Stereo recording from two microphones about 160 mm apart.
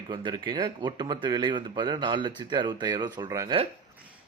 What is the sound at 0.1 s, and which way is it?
Speech, 30° right (ahead or behind).